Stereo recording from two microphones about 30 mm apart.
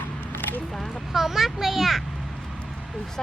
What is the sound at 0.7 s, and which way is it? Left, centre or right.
Speech, centre.